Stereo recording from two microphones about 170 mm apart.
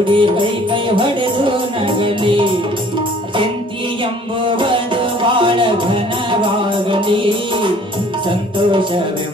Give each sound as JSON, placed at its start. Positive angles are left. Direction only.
{"t": 0.1, "sound": "music", "side_deg": -30}
{"t": 4.6, "sound": "music", "side_deg": -30}